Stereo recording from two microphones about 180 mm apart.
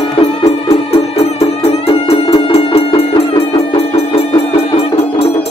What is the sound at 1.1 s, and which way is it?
Music, 35° left (ahead or behind).